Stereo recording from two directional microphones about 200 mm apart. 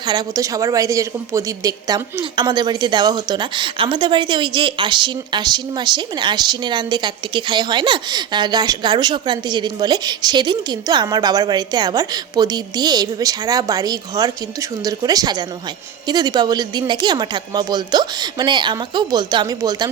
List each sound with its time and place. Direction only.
0.0 s a woman's voice: 20° right (ahead or behind)